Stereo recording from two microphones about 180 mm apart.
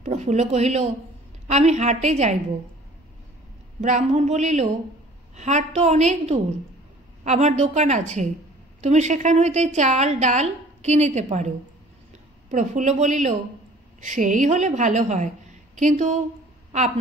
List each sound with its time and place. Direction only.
0.0 s a woman's voice: 40° right (ahead or behind)
3.8 s a woman's voice: 40° right (ahead or behind)